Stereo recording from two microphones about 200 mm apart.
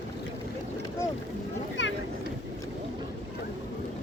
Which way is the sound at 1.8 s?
65° left (ahead or behind).